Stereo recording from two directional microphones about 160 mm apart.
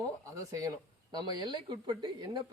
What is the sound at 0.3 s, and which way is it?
Speech, 20° right (ahead or behind).